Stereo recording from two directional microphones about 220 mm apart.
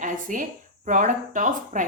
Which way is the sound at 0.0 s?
35° right (ahead or behind).